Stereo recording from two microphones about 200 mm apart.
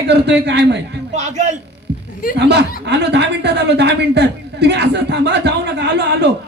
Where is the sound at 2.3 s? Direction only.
60° right (ahead or behind).